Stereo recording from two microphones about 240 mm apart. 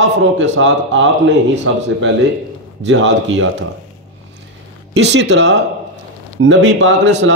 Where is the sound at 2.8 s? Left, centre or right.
Right.